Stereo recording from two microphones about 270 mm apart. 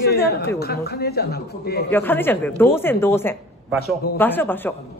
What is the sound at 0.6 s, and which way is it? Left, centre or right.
A man's voice, left.